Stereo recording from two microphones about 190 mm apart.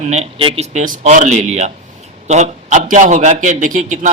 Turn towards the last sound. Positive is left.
turn(degrees=-40)  # may be behind; listen again after turning